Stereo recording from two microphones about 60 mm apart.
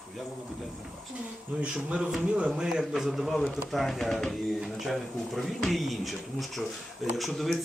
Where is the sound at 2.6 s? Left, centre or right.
Centre.